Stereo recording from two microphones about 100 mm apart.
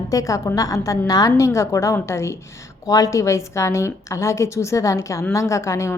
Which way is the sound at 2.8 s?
40° left (ahead or behind).